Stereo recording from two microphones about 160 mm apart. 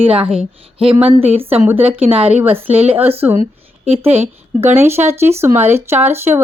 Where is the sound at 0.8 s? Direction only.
35° right (ahead or behind).